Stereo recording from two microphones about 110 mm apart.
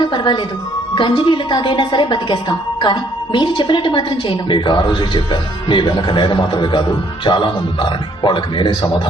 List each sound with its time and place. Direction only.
0.0 s a woman's voice: 45° left (ahead or behind)